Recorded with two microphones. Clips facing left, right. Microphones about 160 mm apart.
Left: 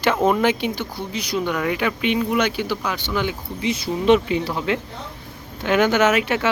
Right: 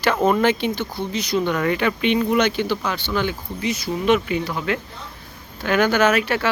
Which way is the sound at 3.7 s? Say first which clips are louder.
Left 3 dB; 30° left (ahead or behind).